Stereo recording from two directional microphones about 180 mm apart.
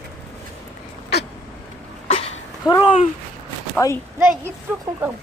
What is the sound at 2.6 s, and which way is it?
Speech, 25° left (ahead or behind).